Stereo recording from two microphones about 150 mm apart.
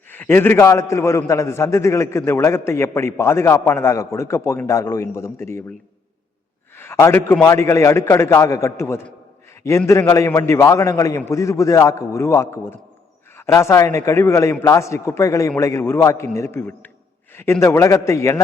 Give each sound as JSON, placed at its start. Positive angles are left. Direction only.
{"t": 0.1, "sound": "a man's voice", "side_deg": 15}
{"t": 6.7, "sound": "a man's voice", "side_deg": 15}